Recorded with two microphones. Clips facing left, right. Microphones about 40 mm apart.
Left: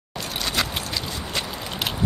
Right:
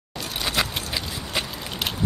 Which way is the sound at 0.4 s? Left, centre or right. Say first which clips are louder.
Right 1 dB; centre.